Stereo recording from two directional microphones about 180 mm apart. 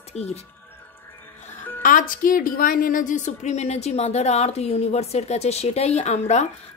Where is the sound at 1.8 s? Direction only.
50° left (ahead or behind).